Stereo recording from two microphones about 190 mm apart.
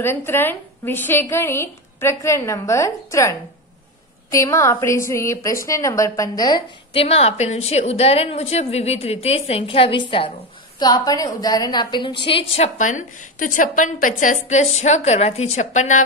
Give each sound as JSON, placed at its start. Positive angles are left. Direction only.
{"t": 0.0, "sound": "a woman's voice", "side_deg": 10}